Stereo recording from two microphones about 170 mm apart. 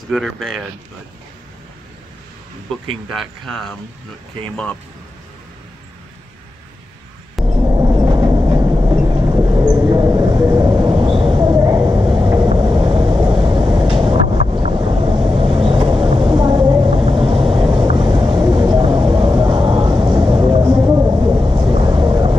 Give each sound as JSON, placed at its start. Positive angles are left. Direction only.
{"t": 0.1, "sound": "speech", "side_deg": 0}
{"t": 3.1, "sound": "speech", "side_deg": 5}
{"t": 7.4, "sound": "train", "side_deg": -20}